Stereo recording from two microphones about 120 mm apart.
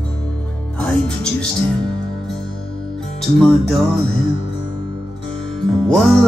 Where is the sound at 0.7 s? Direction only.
5° left (ahead or behind).